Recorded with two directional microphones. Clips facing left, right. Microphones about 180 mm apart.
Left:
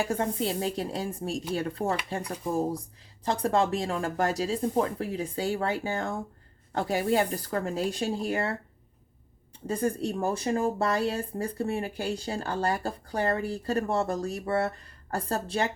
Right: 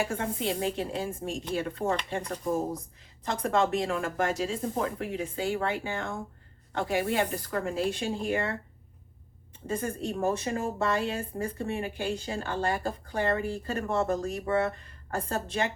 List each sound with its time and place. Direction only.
0.1 s speech: 40° left (ahead or behind)
3.2 s speech: 35° left (ahead or behind)
9.6 s speech: 35° left (ahead or behind)